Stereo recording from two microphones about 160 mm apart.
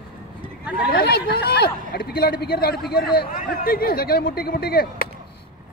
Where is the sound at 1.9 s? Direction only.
70° left (ahead or behind).